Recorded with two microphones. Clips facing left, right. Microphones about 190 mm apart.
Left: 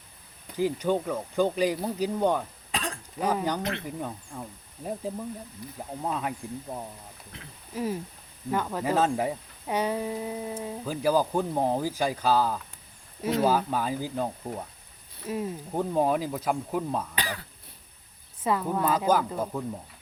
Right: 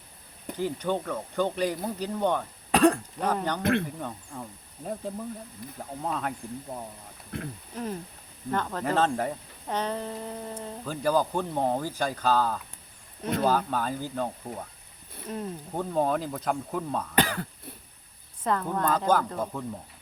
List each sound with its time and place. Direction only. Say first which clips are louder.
0.5 s speech: left 3 dB; 10° left (ahead or behind)
2.7 s cough: right 14 dB; 60° right (ahead or behind)
3.2 s speech: left 1 dB; 5° left (ahead or behind)
3.6 s speech: right 7 dB; 55° right (ahead or behind)
3.8 s speech: left 2 dB; 10° left (ahead or behind)
5.6 s speech: even; 55° right (ahead or behind)
6.0 s speech: left 1 dB; 5° left (ahead or behind)
7.3 s speech: right 14 dB; 55° right (ahead or behind)
7.7 s speech: left 6 dB; 5° left (ahead or behind)
15.3 s speech: left 3 dB; 5° left (ahead or behind)
17.2 s speech: right 8 dB; 50° right (ahead or behind)
18.4 s speech: left 1 dB; 5° left (ahead or behind)